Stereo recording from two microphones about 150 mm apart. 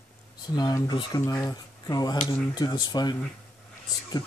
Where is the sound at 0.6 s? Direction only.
25° left (ahead or behind).